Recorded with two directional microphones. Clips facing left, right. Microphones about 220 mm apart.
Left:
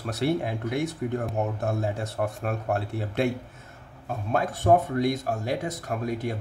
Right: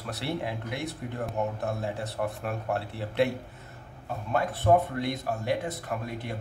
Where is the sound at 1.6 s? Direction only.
45° left (ahead or behind).